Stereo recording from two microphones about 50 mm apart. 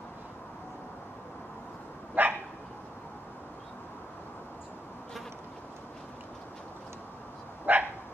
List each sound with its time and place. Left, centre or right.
2.2 s dog: right
7.7 s dog: right